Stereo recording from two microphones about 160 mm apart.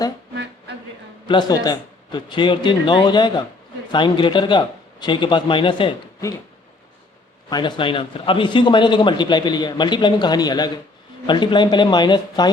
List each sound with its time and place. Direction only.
1.3 s a man's voice: 25° left (ahead or behind)
7.5 s a man's voice: 30° left (ahead or behind)